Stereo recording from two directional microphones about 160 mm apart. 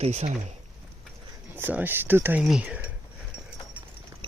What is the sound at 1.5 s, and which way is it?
Speech, 10° right (ahead or behind).